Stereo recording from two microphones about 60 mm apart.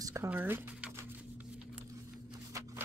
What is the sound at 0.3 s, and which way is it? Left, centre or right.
Speech, right.